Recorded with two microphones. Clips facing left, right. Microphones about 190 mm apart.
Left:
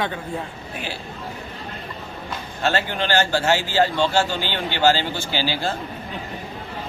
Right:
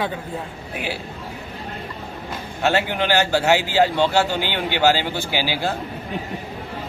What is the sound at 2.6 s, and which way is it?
Speech, 15° right (ahead or behind).